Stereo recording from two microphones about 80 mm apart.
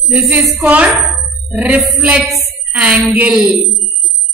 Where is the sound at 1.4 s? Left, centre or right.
Centre.